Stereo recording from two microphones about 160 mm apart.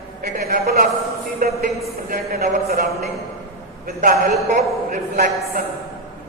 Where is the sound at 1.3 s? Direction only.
65° right (ahead or behind).